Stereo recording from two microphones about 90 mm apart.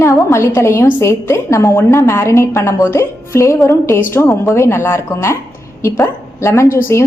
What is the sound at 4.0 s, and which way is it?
A woman's voice, 25° left (ahead or behind).